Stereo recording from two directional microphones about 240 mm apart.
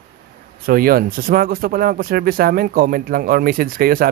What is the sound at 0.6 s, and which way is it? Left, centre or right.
Speech, right.